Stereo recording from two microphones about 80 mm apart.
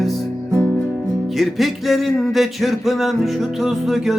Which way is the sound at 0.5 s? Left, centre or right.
Right.